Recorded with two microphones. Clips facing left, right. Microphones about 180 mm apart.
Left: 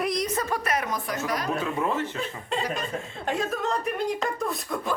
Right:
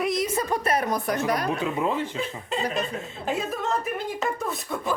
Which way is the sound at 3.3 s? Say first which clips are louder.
Even; centre (ahead or behind).